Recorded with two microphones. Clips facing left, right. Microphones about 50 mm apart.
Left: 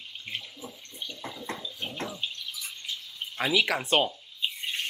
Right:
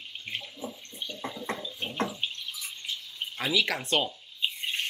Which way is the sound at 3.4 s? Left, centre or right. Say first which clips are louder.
Left 2 dB; centre.